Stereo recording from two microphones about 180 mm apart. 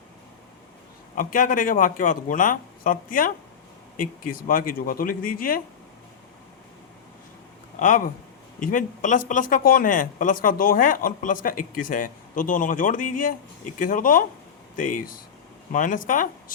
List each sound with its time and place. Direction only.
1.1 s speech: 50° left (ahead or behind)
7.8 s speech: 45° left (ahead or behind)
15.7 s speech: 45° left (ahead or behind)